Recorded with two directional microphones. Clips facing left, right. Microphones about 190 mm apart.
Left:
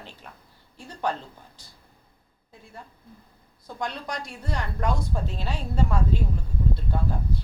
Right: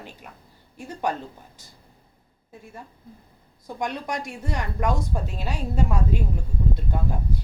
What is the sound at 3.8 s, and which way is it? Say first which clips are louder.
A woman's voice: right 3 dB; 15° right (ahead or behind).